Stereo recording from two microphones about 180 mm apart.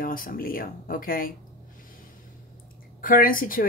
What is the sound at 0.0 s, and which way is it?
Speech, 50° left (ahead or behind).